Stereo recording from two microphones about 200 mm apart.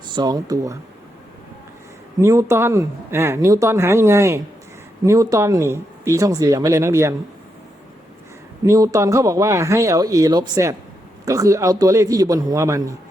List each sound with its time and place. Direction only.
0.1 s speech: 20° right (ahead or behind)
2.2 s speech: 15° right (ahead or behind)
8.6 s speech: 15° right (ahead or behind)